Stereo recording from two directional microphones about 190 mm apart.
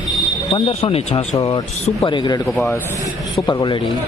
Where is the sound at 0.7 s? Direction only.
30° left (ahead or behind).